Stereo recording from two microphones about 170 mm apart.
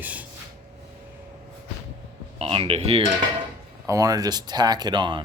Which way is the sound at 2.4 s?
35° right (ahead or behind).